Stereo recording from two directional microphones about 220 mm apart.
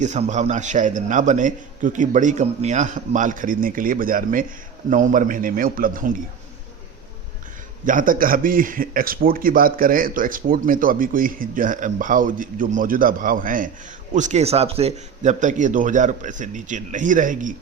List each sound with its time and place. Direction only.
0.0 s a man's voice: 30° right (ahead or behind)
7.9 s a man's voice: 40° right (ahead or behind)